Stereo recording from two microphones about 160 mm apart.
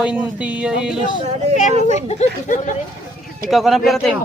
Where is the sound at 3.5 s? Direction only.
Centre (ahead or behind).